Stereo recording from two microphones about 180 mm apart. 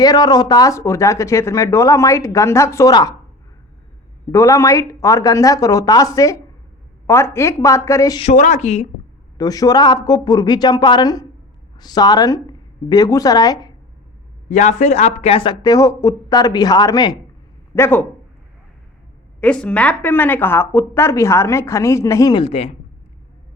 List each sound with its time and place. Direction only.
0.0 s a woman's voice: 20° left (ahead or behind)
4.3 s a woman's voice: 15° left (ahead or behind)
8.2 s speech: 40° left (ahead or behind)
9.4 s a woman's voice: 20° left (ahead or behind)
14.5 s a woman's voice: 40° left (ahead or behind); by 18.0 s 15° left (ahead or behind)
19.4 s a woman's voice: 5° left (ahead or behind); by 22.7 s 35° left (ahead or behind)